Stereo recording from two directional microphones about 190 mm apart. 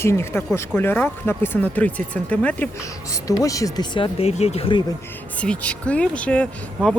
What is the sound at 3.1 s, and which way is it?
Speech, 20° left (ahead or behind).